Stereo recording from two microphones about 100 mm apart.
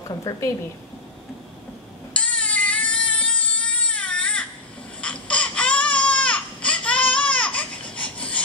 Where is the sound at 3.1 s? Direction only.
15° left (ahead or behind).